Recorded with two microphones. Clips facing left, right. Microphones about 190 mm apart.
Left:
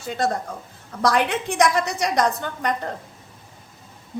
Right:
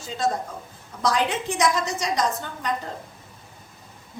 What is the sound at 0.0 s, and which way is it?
A man's voice, 60° left (ahead or behind).